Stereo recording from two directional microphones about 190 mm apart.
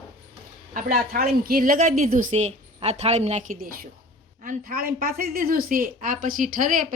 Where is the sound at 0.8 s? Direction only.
50° right (ahead or behind).